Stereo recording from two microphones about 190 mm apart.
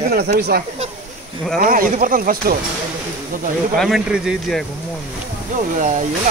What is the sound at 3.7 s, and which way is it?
Speech, centre (ahead or behind).